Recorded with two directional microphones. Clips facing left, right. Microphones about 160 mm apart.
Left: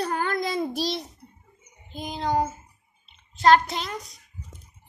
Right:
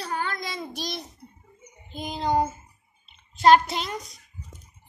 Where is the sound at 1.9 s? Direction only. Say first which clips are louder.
Right 1 dB; centre (ahead or behind).